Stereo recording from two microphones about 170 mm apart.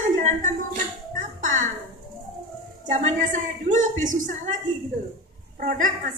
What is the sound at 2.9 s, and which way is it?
A woman's voice, 50° right (ahead or behind).